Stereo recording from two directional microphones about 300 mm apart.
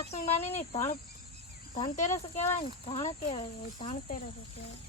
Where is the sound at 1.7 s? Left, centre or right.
Left.